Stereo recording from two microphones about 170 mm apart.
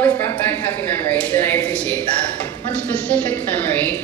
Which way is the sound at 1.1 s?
10° left (ahead or behind).